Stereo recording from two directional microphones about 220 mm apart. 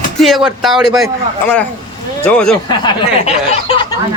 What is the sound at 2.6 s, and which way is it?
Speech, 25° left (ahead or behind).